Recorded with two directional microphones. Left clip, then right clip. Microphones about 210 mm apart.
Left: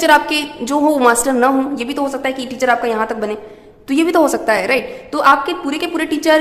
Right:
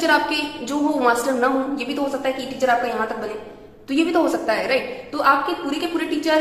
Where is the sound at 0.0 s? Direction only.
45° left (ahead or behind).